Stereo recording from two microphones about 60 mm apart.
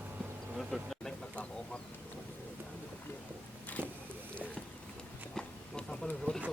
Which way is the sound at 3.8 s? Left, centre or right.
Right.